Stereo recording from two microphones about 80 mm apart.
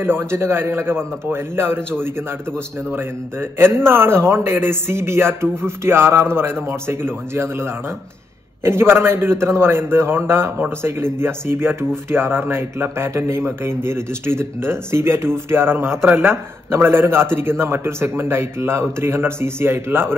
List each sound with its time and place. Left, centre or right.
0.0 s speech: right